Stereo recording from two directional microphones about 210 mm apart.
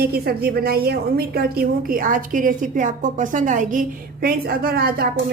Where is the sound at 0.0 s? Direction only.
50° right (ahead or behind).